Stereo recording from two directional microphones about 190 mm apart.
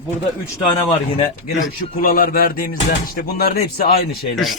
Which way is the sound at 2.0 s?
50° left (ahead or behind).